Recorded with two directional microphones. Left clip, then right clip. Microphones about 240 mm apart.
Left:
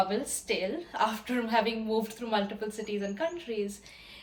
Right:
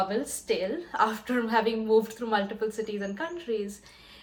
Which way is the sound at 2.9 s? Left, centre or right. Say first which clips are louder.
Left 1 dB; centre.